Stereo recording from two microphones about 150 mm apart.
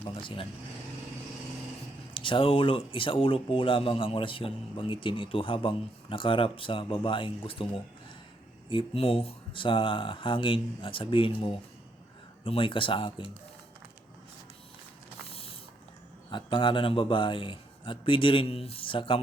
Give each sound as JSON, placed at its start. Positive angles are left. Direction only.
{"t": 0.0, "sound": "speech", "side_deg": 35}
{"t": 2.1, "sound": "speech", "side_deg": 35}
{"t": 8.7, "sound": "speech", "side_deg": 35}
{"t": 15.3, "sound": "mechanisms", "side_deg": 40}
{"t": 16.3, "sound": "speech", "side_deg": 35}